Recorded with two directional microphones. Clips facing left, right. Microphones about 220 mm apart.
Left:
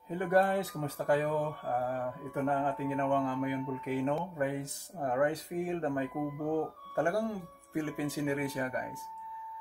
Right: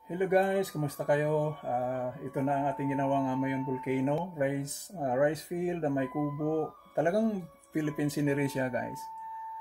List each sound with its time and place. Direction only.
0.1 s speech: 15° right (ahead or behind)